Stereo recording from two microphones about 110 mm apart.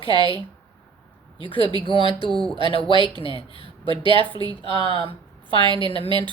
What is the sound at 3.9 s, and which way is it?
A woman's voice, 50° right (ahead or behind).